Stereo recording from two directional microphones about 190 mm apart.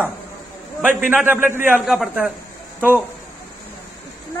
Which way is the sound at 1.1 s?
10° right (ahead or behind).